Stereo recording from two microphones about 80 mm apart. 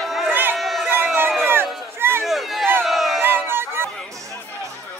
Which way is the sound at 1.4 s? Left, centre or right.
Right.